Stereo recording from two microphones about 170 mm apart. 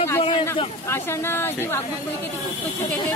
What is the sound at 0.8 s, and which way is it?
Speech, 15° left (ahead or behind).